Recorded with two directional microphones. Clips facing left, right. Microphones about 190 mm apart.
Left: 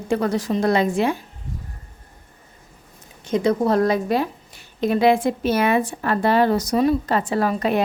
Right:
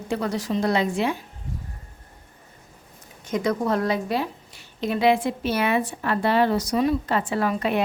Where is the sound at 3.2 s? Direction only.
30° left (ahead or behind).